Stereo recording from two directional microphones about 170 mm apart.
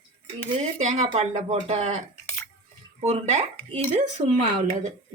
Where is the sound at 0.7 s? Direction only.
40° right (ahead or behind).